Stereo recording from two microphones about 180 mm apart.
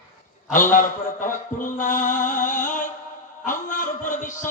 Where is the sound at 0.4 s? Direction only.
45° left (ahead or behind).